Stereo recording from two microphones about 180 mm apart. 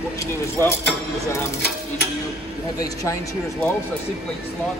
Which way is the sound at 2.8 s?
20° left (ahead or behind).